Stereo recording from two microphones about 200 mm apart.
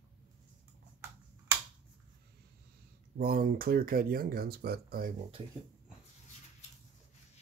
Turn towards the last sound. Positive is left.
turn(degrees=-25)  # may be behind; listen again after turning